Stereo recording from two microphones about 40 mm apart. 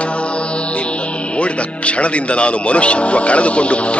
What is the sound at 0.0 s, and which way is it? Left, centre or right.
Music, left.